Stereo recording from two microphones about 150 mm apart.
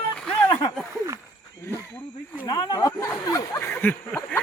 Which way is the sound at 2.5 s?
30° left (ahead or behind).